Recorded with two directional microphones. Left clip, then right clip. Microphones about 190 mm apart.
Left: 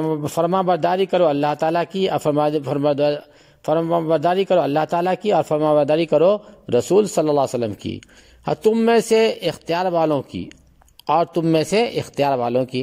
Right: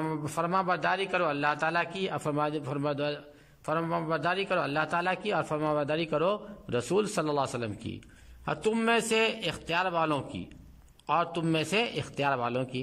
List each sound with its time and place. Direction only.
0.0 s a man's voice: 25° left (ahead or behind)